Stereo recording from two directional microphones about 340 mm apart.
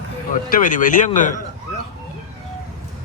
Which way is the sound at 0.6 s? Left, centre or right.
Left.